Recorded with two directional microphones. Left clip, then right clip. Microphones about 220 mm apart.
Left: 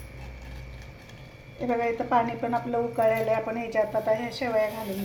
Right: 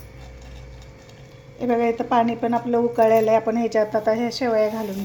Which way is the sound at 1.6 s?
45° right (ahead or behind).